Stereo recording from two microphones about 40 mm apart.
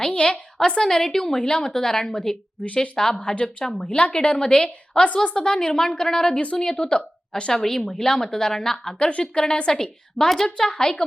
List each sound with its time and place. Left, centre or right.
0.0 s a woman's voice: left
0.8 s a woman's voice: centre
3.8 s a woman's voice: left
7.6 s a woman's voice: centre
9.0 s a woman's voice: left
10.2 s a woman's voice: centre